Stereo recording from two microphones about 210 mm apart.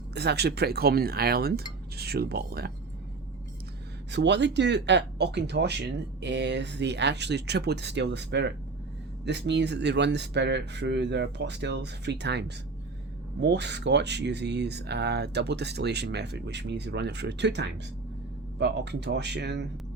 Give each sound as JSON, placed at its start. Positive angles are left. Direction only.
{"t": 0.1, "sound": "speech", "side_deg": -50}
{"t": 4.1, "sound": "speech", "side_deg": -55}